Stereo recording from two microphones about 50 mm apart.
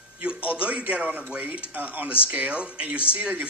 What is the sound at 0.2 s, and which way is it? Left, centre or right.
Speech, right.